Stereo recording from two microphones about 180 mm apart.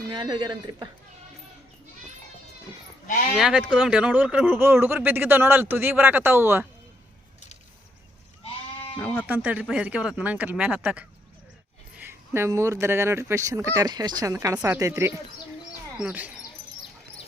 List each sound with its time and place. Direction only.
0.1 s speech: 25° right (ahead or behind)
3.3 s speech: 5° right (ahead or behind)
9.0 s speech: 10° left (ahead or behind)
9.2 s speech: 10° right (ahead or behind)